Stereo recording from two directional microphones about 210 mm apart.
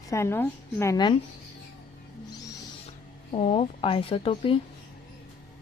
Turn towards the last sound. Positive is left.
turn(degrees=25)  # may be behind; listen again after turning